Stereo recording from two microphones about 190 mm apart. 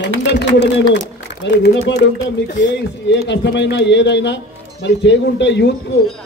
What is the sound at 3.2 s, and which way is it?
A man's voice, 65° left (ahead or behind).